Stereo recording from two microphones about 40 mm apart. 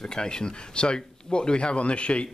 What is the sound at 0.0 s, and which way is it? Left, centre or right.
A man's voice, centre.